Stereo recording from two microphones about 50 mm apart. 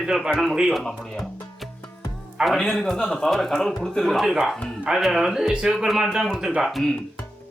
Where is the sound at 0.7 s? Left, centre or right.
Centre.